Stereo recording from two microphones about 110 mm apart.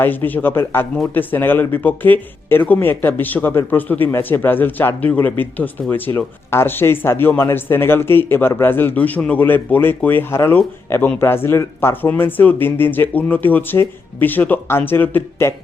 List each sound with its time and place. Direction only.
0.0 s speech: 15° left (ahead or behind)